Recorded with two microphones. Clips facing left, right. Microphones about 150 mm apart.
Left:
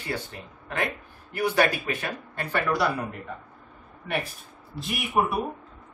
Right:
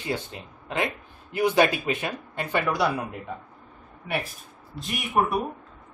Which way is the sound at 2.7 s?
Centre (ahead or behind).